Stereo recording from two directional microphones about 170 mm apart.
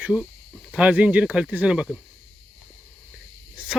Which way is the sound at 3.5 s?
5° right (ahead or behind).